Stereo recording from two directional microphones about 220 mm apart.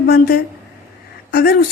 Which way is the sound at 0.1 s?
45° left (ahead or behind).